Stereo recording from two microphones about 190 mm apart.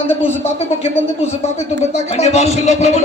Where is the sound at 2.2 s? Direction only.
35° left (ahead or behind).